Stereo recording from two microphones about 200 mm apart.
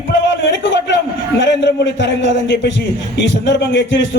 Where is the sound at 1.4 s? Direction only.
60° left (ahead or behind).